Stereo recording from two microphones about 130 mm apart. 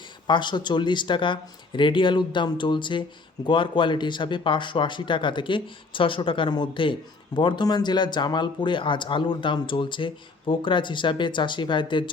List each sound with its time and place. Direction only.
0.3 s a man's voice: 35° left (ahead or behind)